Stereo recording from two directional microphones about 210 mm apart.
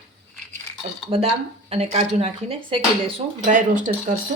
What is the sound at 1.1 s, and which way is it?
Speech, 30° right (ahead or behind).